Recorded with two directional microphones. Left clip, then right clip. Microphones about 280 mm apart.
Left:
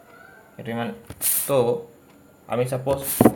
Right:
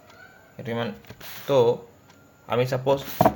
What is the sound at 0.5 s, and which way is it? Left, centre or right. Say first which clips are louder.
Speech: even; centre.